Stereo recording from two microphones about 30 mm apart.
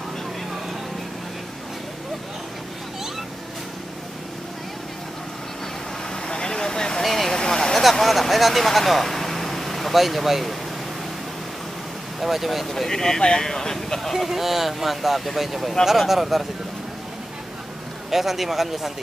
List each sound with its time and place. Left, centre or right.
6.2 s vehicle: left
7.0 s vehicle: centre
7.3 s vehicle: centre
7.9 s speech: centre
12.2 s speech: centre
12.7 s speech: centre
14.1 s speech: centre
18.1 s speech: centre